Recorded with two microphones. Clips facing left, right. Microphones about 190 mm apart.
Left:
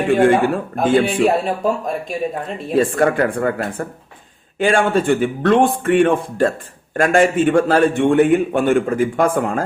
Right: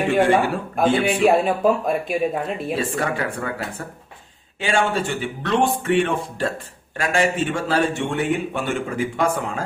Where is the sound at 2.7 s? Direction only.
50° left (ahead or behind).